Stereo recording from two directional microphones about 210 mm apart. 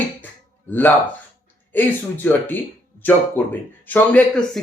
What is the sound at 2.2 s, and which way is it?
Speech, 10° left (ahead or behind).